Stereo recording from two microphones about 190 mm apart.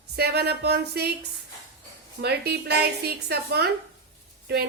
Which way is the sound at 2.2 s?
60° right (ahead or behind).